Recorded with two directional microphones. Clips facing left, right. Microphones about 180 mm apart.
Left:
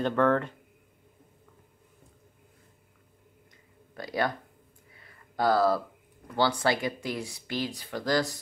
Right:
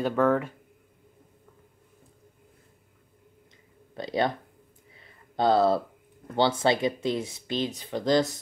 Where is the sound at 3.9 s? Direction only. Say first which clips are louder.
Right 3 dB; 25° right (ahead or behind).